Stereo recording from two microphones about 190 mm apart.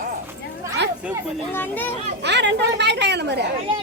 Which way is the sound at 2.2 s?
65° right (ahead or behind).